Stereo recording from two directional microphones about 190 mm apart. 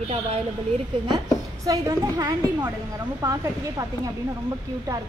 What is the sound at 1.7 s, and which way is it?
A woman's voice, 20° right (ahead or behind).